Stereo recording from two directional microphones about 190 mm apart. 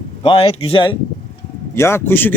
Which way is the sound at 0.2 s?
30° left (ahead or behind).